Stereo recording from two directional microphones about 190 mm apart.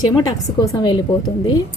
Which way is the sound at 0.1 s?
15° left (ahead or behind).